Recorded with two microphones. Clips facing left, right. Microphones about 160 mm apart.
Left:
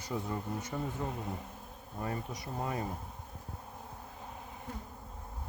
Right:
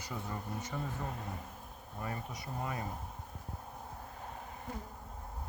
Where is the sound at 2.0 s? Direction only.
30° left (ahead or behind).